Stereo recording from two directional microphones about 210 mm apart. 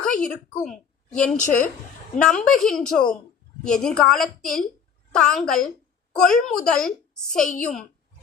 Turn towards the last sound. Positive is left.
turn(degrees=5)  # may be behind; listen again after turning